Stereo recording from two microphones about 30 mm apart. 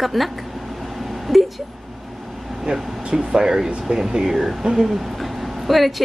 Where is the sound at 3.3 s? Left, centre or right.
Centre.